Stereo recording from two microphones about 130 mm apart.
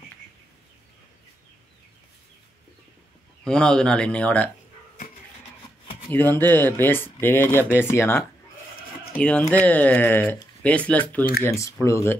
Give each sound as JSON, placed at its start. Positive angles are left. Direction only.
{"t": 3.4, "sound": "speech", "side_deg": 5}
{"t": 6.3, "sound": "speech", "side_deg": 15}
{"t": 11.4, "sound": "speech", "side_deg": 25}